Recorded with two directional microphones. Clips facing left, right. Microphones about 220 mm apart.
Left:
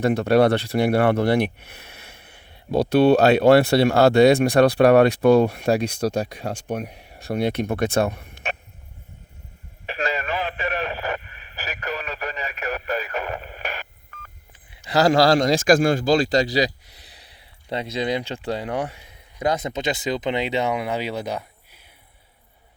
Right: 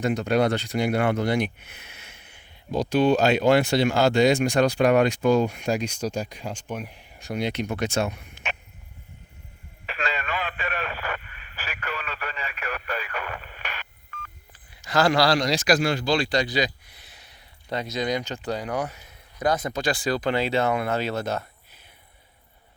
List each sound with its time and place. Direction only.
0.0 s speech: 60° left (ahead or behind)
6.7 s speech: 40° left (ahead or behind)
7.2 s speech: 60° left (ahead or behind)
9.8 s radio: 40° left (ahead or behind)
14.8 s a man's voice: 35° left (ahead or behind); by 21.8 s 10° left (ahead or behind)